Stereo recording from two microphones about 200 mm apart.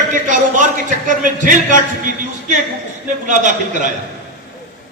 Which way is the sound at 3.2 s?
40° right (ahead or behind).